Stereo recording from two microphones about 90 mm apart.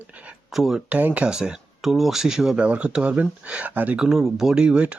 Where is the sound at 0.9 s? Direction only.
15° right (ahead or behind).